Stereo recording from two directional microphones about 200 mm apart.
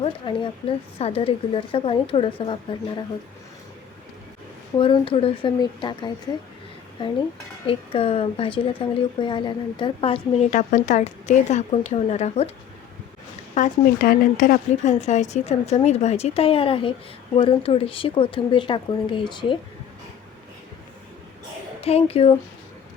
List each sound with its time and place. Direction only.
0.0 s speech: 25° left (ahead or behind)
4.8 s speech: 25° left (ahead or behind)
7.7 s a woman's voice: 30° left (ahead or behind)
13.5 s a woman's voice: 40° left (ahead or behind); by 19.5 s 25° left (ahead or behind)
21.8 s speech: 30° left (ahead or behind)